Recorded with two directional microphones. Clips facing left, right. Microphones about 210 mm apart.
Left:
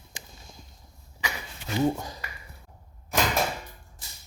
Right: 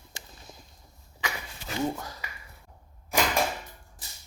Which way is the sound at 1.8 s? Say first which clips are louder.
Left 5 dB; 15° left (ahead or behind).